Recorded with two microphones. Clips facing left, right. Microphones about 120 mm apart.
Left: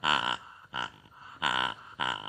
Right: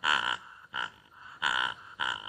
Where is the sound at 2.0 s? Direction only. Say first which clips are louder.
Left 2 dB; 50° left (ahead or behind).